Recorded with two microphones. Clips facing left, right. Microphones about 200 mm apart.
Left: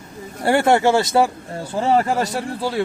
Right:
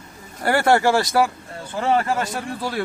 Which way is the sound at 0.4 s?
20° left (ahead or behind).